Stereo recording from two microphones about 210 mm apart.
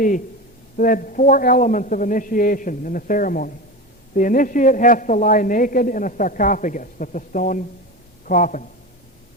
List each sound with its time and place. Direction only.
0.8 s a woman's voice: 40° left (ahead or behind)